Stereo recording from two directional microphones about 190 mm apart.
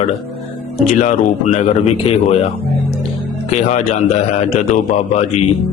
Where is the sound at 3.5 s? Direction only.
35° left (ahead or behind).